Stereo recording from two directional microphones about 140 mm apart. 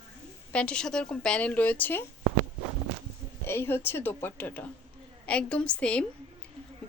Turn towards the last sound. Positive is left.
turn(degrees=10)  # may be behind; listen again after turning